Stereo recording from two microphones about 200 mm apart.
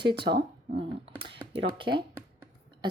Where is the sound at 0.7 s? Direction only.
25° right (ahead or behind).